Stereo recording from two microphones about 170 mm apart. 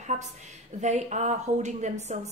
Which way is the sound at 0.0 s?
45° right (ahead or behind).